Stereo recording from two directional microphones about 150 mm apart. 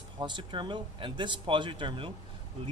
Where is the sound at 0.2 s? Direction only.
30° right (ahead or behind).